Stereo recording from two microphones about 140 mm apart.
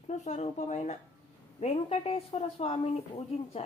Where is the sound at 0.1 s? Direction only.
55° left (ahead or behind).